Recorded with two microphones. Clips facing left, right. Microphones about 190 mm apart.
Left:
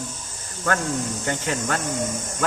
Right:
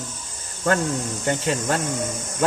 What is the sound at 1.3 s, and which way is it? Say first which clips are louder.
Speech: right 5 dB; 30° right (ahead or behind).